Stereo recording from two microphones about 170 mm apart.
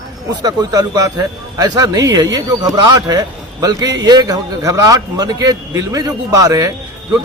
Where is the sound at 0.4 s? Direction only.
20° right (ahead or behind).